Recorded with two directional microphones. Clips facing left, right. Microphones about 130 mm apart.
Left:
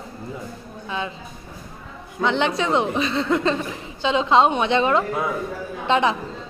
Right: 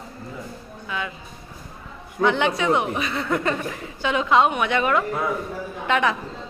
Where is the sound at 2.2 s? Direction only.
25° left (ahead or behind).